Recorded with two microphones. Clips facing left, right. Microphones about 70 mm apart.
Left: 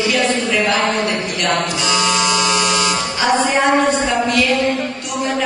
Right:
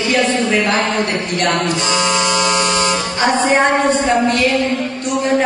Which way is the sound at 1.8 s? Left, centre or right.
Right.